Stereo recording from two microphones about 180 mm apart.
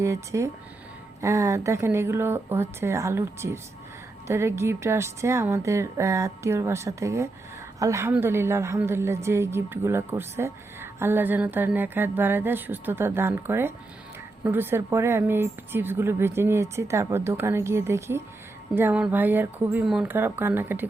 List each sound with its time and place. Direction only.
0.0 s a woman's voice: 15° right (ahead or behind)